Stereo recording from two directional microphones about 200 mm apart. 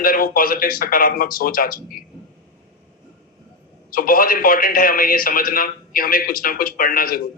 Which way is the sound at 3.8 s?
45° left (ahead or behind).